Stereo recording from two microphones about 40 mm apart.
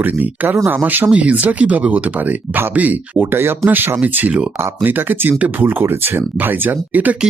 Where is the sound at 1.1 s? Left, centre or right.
Right.